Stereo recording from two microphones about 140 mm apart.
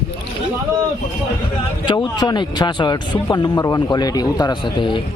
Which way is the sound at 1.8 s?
30° left (ahead or behind).